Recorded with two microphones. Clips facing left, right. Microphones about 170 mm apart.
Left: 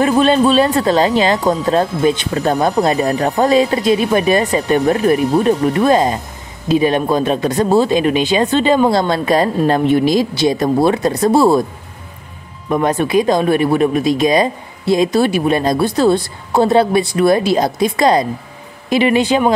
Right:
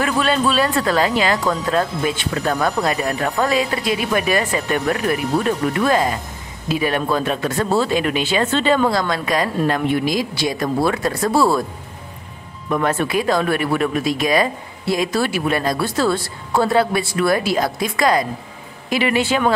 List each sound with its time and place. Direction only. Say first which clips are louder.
0.0 s speech: left 7 dB; 25° left (ahead or behind)
12.6 s speech: left 4 dB; 20° left (ahead or behind)